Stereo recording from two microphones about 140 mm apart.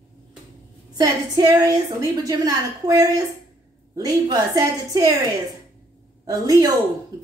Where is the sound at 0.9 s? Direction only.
25° right (ahead or behind).